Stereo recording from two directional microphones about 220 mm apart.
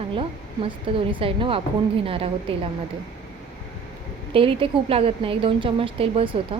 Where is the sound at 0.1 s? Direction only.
25° right (ahead or behind).